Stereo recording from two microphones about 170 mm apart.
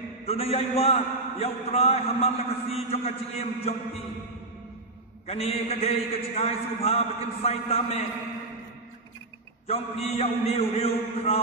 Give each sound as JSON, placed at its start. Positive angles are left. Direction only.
{"t": 0.2, "sound": "a man's voice", "side_deg": 35}
{"t": 5.2, "sound": "a man's voice", "side_deg": 35}
{"t": 9.7, "sound": "a man's voice", "side_deg": 35}